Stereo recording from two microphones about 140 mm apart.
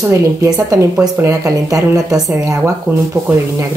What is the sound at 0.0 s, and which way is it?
A woman's voice, 20° right (ahead or behind).